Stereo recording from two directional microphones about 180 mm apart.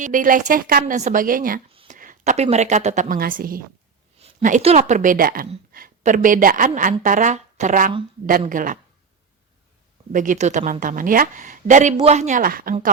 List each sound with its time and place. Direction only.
0.0 s a woman's voice: 45° right (ahead or behind)
4.4 s a woman's voice: 40° right (ahead or behind)
10.1 s a woman's voice: 45° right (ahead or behind)